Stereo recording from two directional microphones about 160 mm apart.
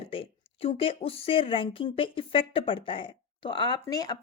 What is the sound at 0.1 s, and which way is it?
A woman's voice, 35° left (ahead or behind).